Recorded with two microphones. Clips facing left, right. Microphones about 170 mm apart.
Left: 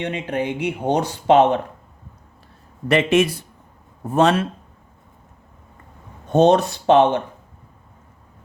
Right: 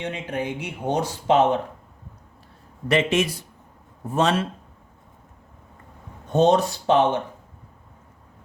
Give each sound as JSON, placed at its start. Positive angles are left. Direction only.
{"t": 0.0, "sound": "speech", "side_deg": 70}
{"t": 2.9, "sound": "speech", "side_deg": 60}
{"t": 6.3, "sound": "speech", "side_deg": 65}